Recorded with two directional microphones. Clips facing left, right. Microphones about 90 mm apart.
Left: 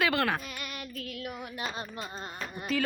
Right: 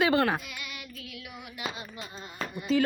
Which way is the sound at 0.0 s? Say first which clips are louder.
Right 3 dB; 30° right (ahead or behind).